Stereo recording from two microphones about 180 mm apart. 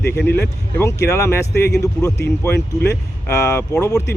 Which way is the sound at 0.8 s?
15° left (ahead or behind).